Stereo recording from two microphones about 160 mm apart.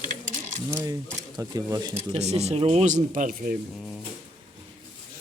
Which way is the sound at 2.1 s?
40° right (ahead or behind).